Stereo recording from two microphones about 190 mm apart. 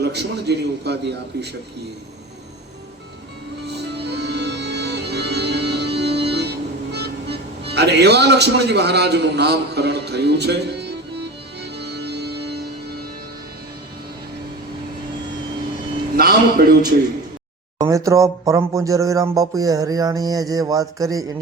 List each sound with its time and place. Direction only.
0.0 s a man's voice: 60° right (ahead or behind)
3.7 s music: 60° right (ahead or behind)
16.1 s a sound: 55° right (ahead or behind)
17.7 s speech: 15° right (ahead or behind)